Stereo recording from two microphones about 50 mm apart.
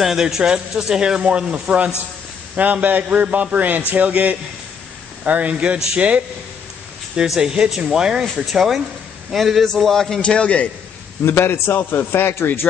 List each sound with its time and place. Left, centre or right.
0.0 s a man's voice: centre; by 6.2 s right
7.3 s a man's voice: centre
10.2 s a man's voice: left
11.2 s a man's voice: left